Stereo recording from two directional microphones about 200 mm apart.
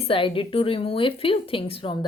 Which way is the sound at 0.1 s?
25° left (ahead or behind).